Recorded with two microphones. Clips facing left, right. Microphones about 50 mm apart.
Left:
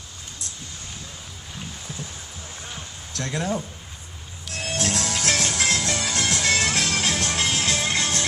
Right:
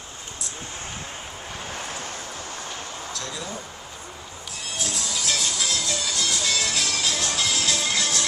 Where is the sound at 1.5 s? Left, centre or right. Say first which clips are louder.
Right 3 dB; right.